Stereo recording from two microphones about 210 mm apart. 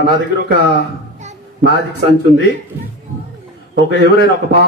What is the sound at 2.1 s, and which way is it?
Speech, 55° left (ahead or behind).